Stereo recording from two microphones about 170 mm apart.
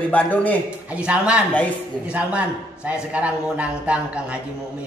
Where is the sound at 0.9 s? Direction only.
5° right (ahead or behind).